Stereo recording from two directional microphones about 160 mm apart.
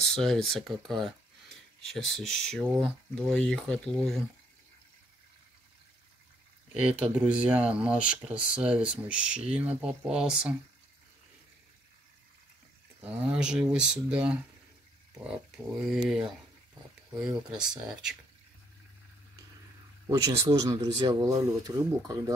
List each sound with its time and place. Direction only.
0.0 s speech: 5° left (ahead or behind)
6.7 s speech: 5° right (ahead or behind)
13.2 s speech: 5° right (ahead or behind)
17.5 s speech: 5° right (ahead or behind)
20.1 s speech: 25° right (ahead or behind)